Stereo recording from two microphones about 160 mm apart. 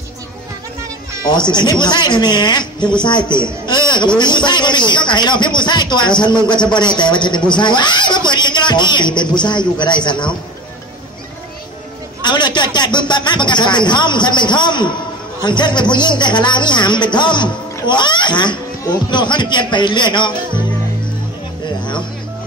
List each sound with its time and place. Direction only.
1.2 s speech: 30° left (ahead or behind)
12.2 s speech: 30° left (ahead or behind)